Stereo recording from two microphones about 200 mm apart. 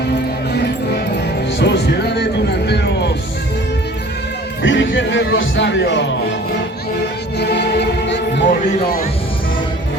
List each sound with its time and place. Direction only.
1.5 s music: 60° left (ahead or behind)
4.6 s speech: 70° left (ahead or behind)
7.3 s music: 55° left (ahead or behind)